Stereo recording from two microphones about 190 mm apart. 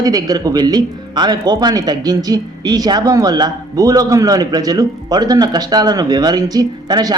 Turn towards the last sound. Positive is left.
turn(degrees=-20)  # may be behind; listen again after turning